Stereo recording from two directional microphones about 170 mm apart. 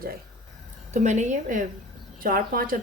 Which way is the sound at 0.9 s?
45° right (ahead or behind).